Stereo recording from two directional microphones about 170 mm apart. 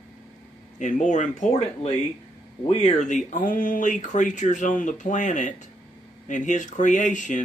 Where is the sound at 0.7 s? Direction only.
45° left (ahead or behind).